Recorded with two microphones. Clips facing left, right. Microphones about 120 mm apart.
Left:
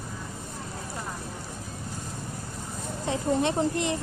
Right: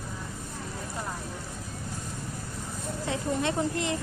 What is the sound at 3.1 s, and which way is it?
Speech, 20° left (ahead or behind).